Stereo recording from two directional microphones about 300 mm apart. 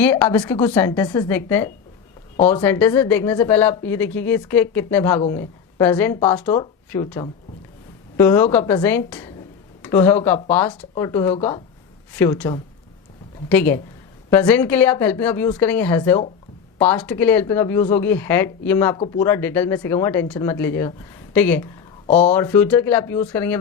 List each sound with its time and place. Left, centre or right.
0.0 s a woman's voice: centre
22.0 s speech: left
22.3 s speech: centre